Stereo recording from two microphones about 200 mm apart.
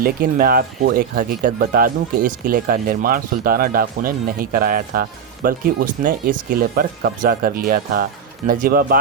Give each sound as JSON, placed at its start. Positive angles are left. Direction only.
{"t": 0.0, "sound": "speech", "side_deg": -45}